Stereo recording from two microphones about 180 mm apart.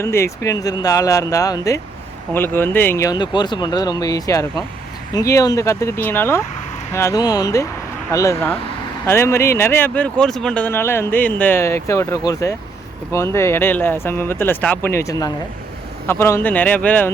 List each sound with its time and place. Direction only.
0.0 s speech: 15° left (ahead or behind)